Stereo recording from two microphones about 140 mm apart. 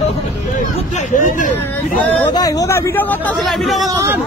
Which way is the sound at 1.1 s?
70° left (ahead or behind).